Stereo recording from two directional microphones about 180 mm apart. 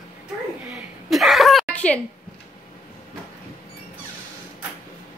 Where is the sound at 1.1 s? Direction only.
Centre (ahead or behind).